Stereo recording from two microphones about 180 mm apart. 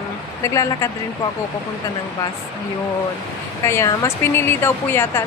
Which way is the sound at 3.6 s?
15° left (ahead or behind).